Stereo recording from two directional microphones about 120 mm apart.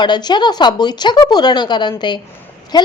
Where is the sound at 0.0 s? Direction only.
35° left (ahead or behind).